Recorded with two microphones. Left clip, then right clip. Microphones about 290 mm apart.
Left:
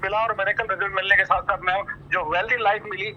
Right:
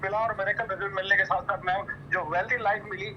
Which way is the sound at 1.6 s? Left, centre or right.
Centre.